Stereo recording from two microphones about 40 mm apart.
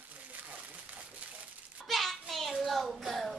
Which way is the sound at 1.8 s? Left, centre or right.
Centre.